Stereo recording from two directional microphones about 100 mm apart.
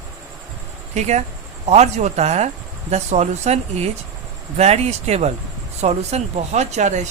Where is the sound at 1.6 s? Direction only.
90° right.